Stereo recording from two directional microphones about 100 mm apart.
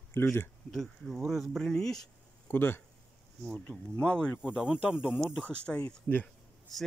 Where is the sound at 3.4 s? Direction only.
5° left (ahead or behind).